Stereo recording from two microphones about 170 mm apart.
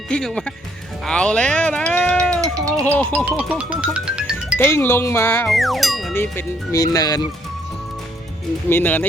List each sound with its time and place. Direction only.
0.1 s speech: 5° left (ahead or behind)
2.4 s music: 20° right (ahead or behind)
2.8 s speech: 10° left (ahead or behind)
3.2 s speech: 5° right (ahead or behind)
4.5 s speech: 15° left (ahead or behind)
5.5 s speech: centre (ahead or behind)
6.1 s speech: 15° left (ahead or behind)
8.7 s speech: 10° left (ahead or behind)